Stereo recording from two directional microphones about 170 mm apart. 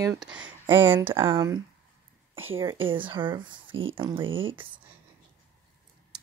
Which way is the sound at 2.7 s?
30° right (ahead or behind).